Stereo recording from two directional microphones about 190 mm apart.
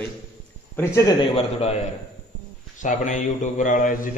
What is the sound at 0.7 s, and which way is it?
Speech, 15° left (ahead or behind).